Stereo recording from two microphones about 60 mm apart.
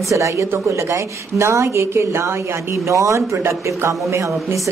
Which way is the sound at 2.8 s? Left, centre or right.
Right.